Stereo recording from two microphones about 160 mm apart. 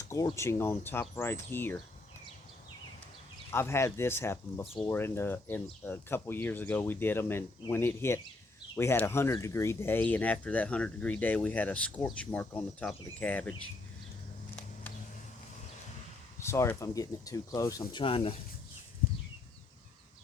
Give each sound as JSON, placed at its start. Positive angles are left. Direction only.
{"t": 0.0, "sound": "speech", "side_deg": 20}
{"t": 3.5, "sound": "speech", "side_deg": 15}
{"t": 4.6, "sound": "speech", "side_deg": 0}
{"t": 4.9, "sound": "speech", "side_deg": 15}
{"t": 16.4, "sound": "speech", "side_deg": 15}
{"t": 18.0, "sound": "speech", "side_deg": 35}